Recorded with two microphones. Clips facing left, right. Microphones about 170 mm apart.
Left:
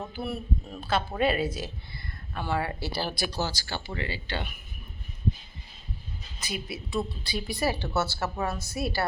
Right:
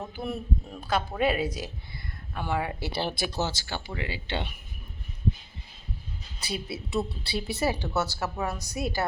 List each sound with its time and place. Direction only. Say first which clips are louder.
0.2 s a woman's voice: right 1 dB; 15° right (ahead or behind)
6.4 s speech: right 2 dB; 30° right (ahead or behind)